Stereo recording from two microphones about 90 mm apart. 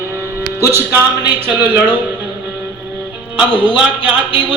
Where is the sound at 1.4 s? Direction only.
20° right (ahead or behind).